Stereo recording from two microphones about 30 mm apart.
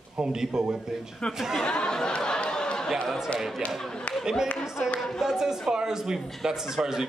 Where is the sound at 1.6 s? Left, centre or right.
Left.